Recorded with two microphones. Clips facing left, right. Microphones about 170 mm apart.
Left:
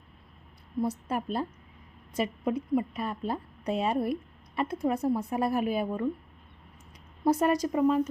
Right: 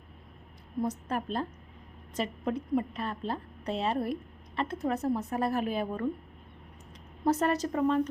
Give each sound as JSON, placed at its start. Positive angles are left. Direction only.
{"t": 0.8, "sound": "a woman's voice", "side_deg": 10}
{"t": 7.3, "sound": "a woman's voice", "side_deg": 10}